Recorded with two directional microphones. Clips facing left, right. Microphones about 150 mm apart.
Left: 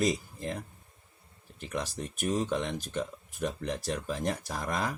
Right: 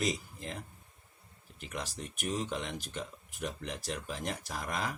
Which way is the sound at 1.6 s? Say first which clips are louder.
Left 5 dB; 40° left (ahead or behind).